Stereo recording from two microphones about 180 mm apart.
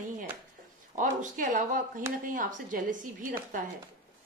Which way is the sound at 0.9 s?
45° right (ahead or behind).